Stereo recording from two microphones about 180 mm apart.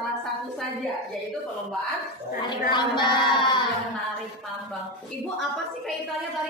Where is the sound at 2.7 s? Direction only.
25° left (ahead or behind).